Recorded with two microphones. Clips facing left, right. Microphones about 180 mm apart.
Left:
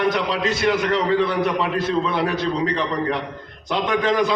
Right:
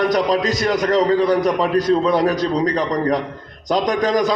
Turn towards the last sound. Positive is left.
turn(degrees=-40)  # may be behind; listen again after turning